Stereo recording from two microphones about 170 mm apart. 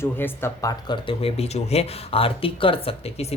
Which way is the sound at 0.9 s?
35° left (ahead or behind).